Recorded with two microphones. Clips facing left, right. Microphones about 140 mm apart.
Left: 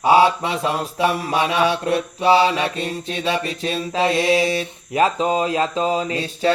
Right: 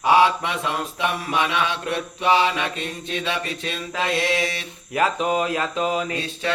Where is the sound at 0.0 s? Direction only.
30° left (ahead or behind).